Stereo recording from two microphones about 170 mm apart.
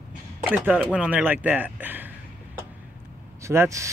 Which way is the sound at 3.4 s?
15° right (ahead or behind).